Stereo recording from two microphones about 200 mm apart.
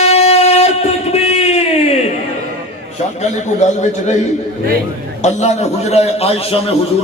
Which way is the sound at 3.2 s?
35° left (ahead or behind).